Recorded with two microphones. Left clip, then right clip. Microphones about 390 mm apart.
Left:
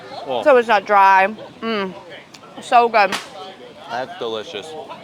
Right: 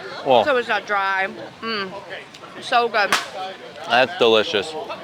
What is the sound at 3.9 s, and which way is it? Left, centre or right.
Speech, right.